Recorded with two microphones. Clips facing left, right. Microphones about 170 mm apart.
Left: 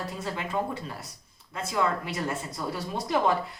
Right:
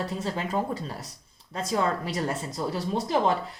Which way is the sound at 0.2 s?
35° right (ahead or behind).